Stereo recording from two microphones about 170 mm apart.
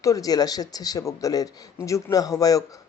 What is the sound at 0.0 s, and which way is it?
Speech, 20° left (ahead or behind).